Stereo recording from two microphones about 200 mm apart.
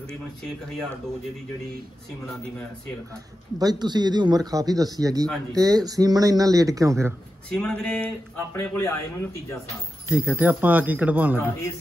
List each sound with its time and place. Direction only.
3.5 s a man's voice: 20° right (ahead or behind)
7.4 s a sound: 5° left (ahead or behind)
8.5 s a man's voice: 10° left (ahead or behind)
10.0 s speech: 10° right (ahead or behind)